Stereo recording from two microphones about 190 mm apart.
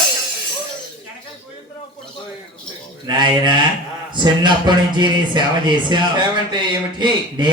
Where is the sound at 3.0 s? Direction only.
25° right (ahead or behind).